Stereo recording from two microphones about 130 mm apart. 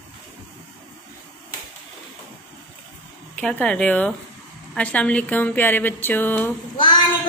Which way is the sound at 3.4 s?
10° left (ahead or behind).